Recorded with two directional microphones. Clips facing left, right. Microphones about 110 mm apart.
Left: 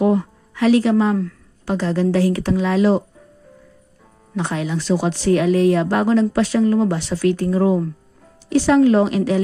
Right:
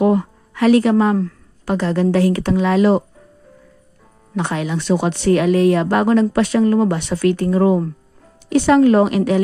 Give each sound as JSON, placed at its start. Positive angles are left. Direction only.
{"t": 0.0, "sound": "speech", "side_deg": -55}
{"t": 4.4, "sound": "speech", "side_deg": -65}